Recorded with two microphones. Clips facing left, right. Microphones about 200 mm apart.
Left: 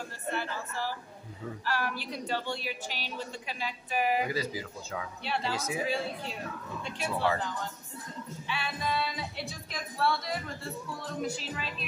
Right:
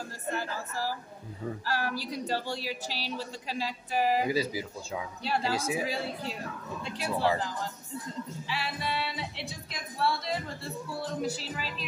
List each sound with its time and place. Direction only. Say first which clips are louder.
0.3 s a woman's voice: right 1 dB; 40° right (ahead or behind)
4.3 s speech: right 4 dB; 10° right (ahead or behind)
5.2 s a woman's voice: right 4 dB; 40° right (ahead or behind)